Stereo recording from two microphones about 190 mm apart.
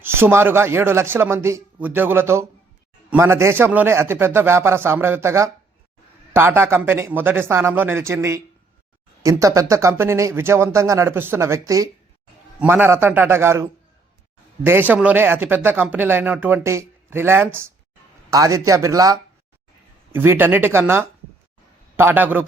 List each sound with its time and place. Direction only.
0.0 s speech: 10° right (ahead or behind)